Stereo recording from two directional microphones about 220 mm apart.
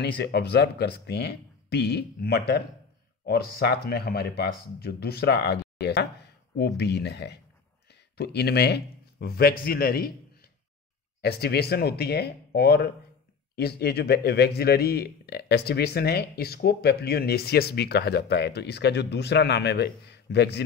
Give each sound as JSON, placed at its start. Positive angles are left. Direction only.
{"t": 0.0, "sound": "a man's voice", "side_deg": 50}